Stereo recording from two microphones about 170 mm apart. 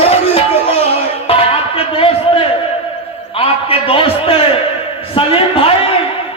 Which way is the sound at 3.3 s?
35° left (ahead or behind).